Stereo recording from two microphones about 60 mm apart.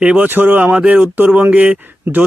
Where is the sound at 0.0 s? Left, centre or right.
Right.